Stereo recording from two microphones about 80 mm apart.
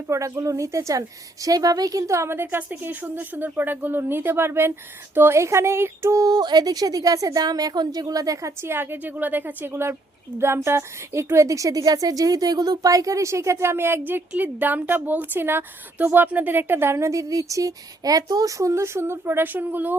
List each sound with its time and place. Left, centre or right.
0.1 s a woman's voice: right
6.1 s a woman's voice: right
8.7 s a woman's voice: right